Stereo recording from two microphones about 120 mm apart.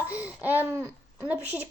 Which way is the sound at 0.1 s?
10° right (ahead or behind).